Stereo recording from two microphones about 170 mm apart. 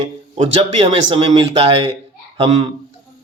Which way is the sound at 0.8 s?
35° right (ahead or behind).